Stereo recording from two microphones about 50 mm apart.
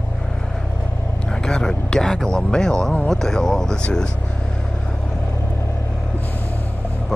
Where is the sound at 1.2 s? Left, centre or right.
Centre.